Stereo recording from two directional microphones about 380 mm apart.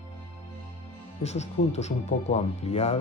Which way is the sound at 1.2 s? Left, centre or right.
Centre.